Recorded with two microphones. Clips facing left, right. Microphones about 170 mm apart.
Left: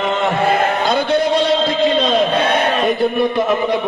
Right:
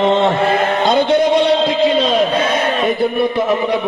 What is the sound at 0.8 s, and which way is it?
Speech, 20° right (ahead or behind).